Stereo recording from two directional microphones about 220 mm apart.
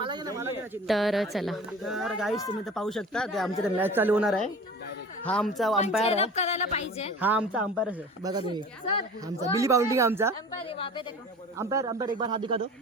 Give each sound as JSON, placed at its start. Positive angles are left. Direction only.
{"t": 0.0, "sound": "a sound", "side_deg": -20}
{"t": 0.9, "sound": "speech", "side_deg": 0}
{"t": 3.8, "sound": "a woman's voice", "side_deg": -10}
{"t": 6.0, "sound": "a woman's voice", "side_deg": 25}
{"t": 7.2, "sound": "a woman's voice", "side_deg": -5}
{"t": 8.3, "sound": "a woman's voice", "side_deg": -20}
{"t": 10.7, "sound": "a woman's voice", "side_deg": 25}
{"t": 11.5, "sound": "a woman's voice", "side_deg": -15}